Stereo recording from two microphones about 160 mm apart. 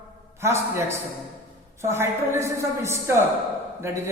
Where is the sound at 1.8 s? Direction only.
15° right (ahead or behind).